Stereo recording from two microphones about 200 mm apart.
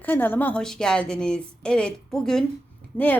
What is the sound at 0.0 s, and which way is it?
A woman's voice, 10° left (ahead or behind).